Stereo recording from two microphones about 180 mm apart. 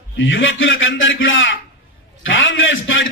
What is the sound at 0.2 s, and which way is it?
A man's voice, 90° left.